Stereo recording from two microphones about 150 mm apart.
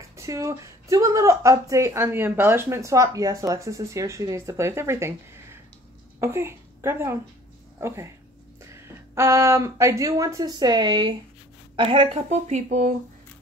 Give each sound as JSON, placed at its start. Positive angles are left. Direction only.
{"t": 0.1, "sound": "a woman's voice", "side_deg": -20}
{"t": 12.1, "sound": "speech", "side_deg": -50}